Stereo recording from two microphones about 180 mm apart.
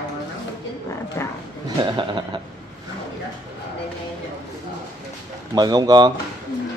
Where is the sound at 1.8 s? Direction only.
25° right (ahead or behind).